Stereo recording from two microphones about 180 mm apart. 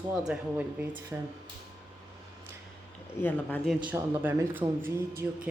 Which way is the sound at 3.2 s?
10° left (ahead or behind).